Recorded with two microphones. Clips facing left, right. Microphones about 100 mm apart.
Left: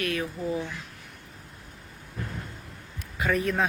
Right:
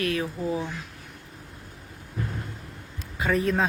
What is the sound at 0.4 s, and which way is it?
Speech, 20° right (ahead or behind).